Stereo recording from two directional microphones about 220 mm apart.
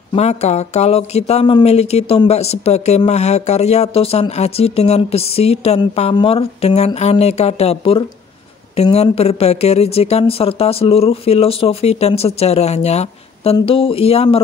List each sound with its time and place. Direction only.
0.1 s speech: 30° left (ahead or behind)